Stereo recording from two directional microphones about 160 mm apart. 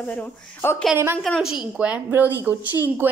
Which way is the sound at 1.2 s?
Centre (ahead or behind).